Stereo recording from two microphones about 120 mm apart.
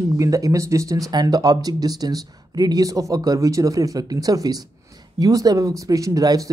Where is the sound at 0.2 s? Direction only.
30° right (ahead or behind).